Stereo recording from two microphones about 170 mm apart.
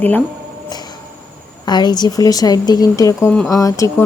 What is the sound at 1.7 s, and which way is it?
A woman's voice, 25° left (ahead or behind).